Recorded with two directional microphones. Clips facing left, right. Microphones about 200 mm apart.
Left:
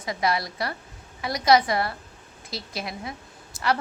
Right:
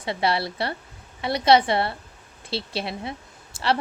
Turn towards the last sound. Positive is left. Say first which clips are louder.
# right 1 dB
turn(degrees=-30)  # may be behind; listen again after turning